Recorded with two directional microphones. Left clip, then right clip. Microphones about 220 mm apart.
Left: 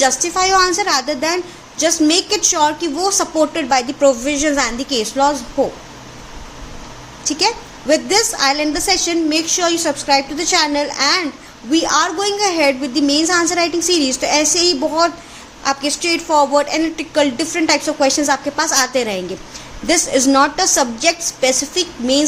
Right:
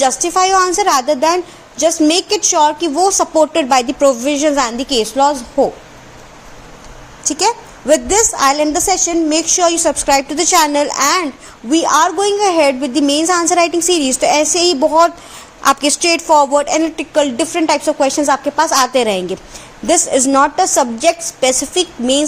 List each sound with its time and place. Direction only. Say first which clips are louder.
0.0 s a woman's voice: right 2 dB; 25° right (ahead or behind)
7.3 s a woman's voice: right 2 dB; 25° right (ahead or behind)